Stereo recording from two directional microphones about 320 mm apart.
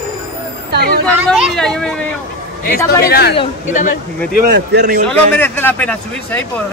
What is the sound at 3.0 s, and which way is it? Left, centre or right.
Speech, left.